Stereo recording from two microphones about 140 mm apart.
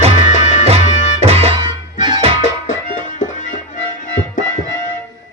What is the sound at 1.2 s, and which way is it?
Music, 45° right (ahead or behind).